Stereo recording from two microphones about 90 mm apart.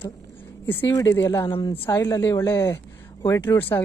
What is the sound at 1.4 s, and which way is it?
Speech, 75° left (ahead or behind).